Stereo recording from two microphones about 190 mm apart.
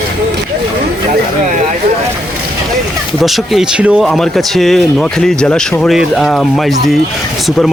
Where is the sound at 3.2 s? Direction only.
Centre (ahead or behind).